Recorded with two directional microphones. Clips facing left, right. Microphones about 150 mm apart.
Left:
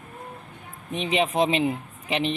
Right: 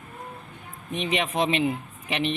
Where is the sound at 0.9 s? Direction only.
30° left (ahead or behind).